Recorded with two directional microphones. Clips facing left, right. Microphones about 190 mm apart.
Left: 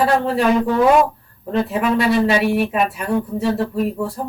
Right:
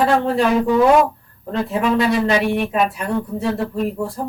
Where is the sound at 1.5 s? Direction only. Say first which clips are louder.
Left 1 dB; 5° left (ahead or behind).